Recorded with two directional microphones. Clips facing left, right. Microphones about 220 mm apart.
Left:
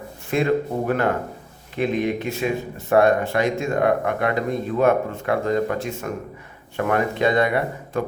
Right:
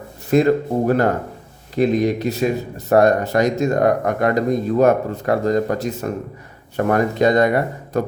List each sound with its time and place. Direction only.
0.3 s speech: 40° right (ahead or behind)